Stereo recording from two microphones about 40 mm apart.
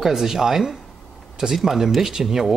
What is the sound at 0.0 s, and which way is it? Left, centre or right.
Speech, centre.